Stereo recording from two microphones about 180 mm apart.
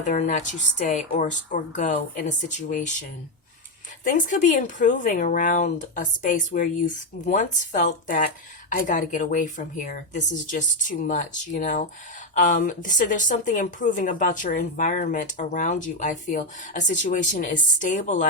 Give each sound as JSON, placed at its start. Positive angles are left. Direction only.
{"t": 0.0, "sound": "a woman's voice", "side_deg": 45}
{"t": 4.0, "sound": "a woman's voice", "side_deg": 45}